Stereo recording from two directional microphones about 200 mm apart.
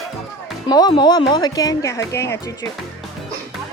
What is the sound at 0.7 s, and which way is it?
Speech, 20° left (ahead or behind).